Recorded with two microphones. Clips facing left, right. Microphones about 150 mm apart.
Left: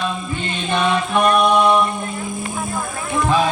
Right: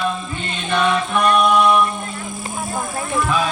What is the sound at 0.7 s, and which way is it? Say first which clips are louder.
Music: even; 25° left (ahead or behind).